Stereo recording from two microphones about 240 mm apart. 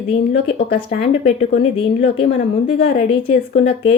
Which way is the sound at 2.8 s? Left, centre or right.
Left.